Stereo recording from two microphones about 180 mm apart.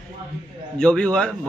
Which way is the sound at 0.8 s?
5° left (ahead or behind).